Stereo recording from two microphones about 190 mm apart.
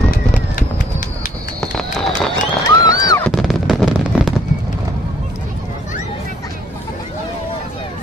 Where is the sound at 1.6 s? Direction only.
5° left (ahead or behind).